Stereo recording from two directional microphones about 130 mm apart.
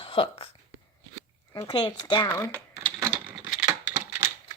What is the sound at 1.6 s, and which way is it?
Speech, 35° left (ahead or behind).